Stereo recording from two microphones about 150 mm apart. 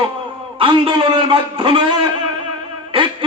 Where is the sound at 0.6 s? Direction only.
35° right (ahead or behind).